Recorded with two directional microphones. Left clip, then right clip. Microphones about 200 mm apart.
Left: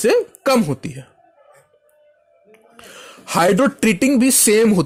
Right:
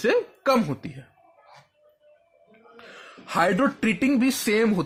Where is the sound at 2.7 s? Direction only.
40° left (ahead or behind).